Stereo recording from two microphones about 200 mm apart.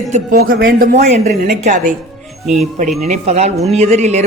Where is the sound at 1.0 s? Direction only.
35° right (ahead or behind).